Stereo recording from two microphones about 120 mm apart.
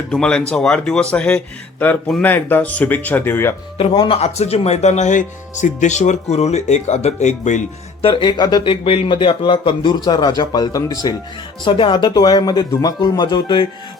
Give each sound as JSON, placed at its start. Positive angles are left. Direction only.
{"t": 0.1, "sound": "speech", "side_deg": 5}
{"t": 3.8, "sound": "speech", "side_deg": 50}
{"t": 8.0, "sound": "speech", "side_deg": 45}
{"t": 11.6, "sound": "speech", "side_deg": 45}